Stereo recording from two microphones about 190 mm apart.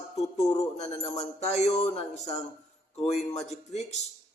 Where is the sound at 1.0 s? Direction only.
35° left (ahead or behind).